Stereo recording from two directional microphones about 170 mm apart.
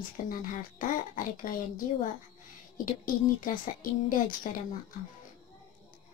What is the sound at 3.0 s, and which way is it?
Speech, 55° left (ahead or behind).